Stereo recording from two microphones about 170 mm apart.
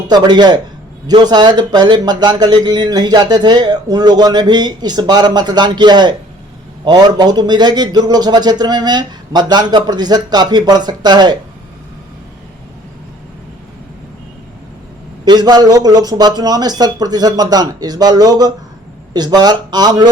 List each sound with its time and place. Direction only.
0.1 s speech: 25° right (ahead or behind)
15.2 s speech: 25° right (ahead or behind)